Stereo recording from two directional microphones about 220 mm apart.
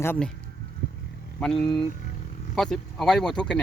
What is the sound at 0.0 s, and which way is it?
Speech, 10° left (ahead or behind).